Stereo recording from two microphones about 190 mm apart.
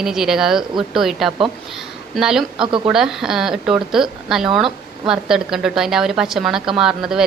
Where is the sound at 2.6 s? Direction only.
25° right (ahead or behind).